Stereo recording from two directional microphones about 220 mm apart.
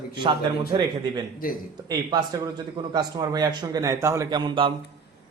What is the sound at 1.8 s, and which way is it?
A man's voice, 20° right (ahead or behind).